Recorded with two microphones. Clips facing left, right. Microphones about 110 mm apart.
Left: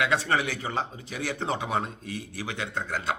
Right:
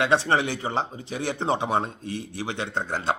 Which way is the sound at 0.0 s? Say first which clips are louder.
Right 4 dB; 30° right (ahead or behind).